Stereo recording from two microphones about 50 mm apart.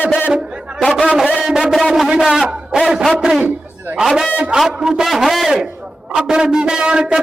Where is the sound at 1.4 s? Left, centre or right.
Centre.